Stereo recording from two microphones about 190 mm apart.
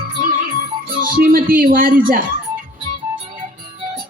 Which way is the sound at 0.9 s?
50° right (ahead or behind).